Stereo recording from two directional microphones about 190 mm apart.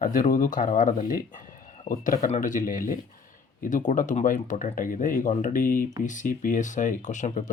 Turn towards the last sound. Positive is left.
turn(degrees=40)  # may be behind; listen again after turning